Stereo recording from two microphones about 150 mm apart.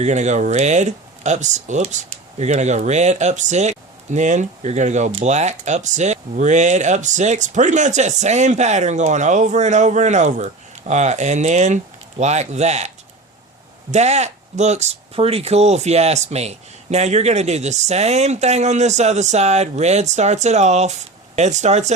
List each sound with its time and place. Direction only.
0.0 s speech: 50° right (ahead or behind)
13.9 s speech: 50° right (ahead or behind)